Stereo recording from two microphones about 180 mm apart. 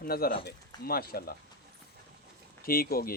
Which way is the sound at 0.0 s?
55° left (ahead or behind).